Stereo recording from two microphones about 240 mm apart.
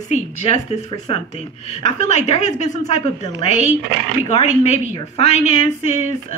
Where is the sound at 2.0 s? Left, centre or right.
Left.